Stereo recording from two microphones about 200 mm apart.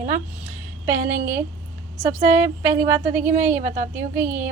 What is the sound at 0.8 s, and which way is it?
A woman's voice, 10° right (ahead or behind).